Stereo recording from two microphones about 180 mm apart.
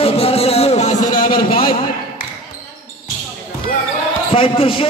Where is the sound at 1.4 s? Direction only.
30° left (ahead or behind).